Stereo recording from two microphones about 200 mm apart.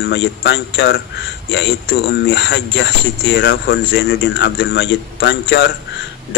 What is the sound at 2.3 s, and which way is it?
A man's voice, 60° left (ahead or behind).